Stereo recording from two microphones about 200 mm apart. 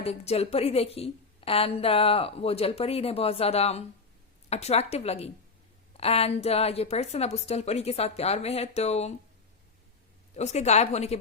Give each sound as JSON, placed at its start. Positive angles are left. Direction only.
{"t": 0.0, "sound": "a woman's voice", "side_deg": 30}
{"t": 10.3, "sound": "a woman's voice", "side_deg": 35}